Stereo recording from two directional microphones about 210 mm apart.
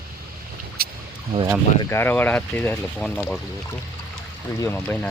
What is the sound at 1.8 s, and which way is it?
Speech, 10° left (ahead or behind).